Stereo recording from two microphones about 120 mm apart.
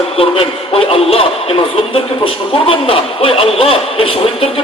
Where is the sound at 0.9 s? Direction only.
55° left (ahead or behind).